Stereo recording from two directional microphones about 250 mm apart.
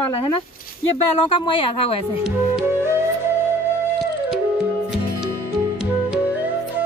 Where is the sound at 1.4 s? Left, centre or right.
Left.